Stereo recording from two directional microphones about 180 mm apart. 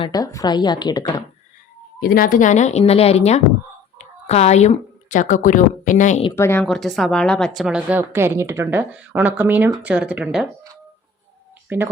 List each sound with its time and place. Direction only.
0.0 s speech: 20° left (ahead or behind)
2.0 s a woman's voice: 55° left (ahead or behind)
6.3 s speech: 15° left (ahead or behind)
6.7 s a woman's voice: centre (ahead or behind)
11.7 s a woman's voice: 10° right (ahead or behind)